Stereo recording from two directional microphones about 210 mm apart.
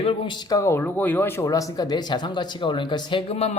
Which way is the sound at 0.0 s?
25° left (ahead or behind).